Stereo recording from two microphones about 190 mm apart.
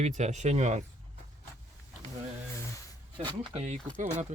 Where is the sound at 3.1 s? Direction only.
30° right (ahead or behind).